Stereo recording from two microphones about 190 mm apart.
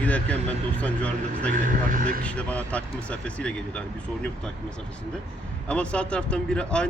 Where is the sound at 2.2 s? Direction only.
5° left (ahead or behind).